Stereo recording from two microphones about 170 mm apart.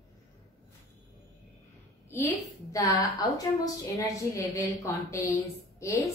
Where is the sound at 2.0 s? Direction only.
15° left (ahead or behind).